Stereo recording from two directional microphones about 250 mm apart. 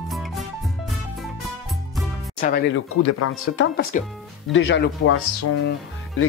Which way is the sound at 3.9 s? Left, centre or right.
Left.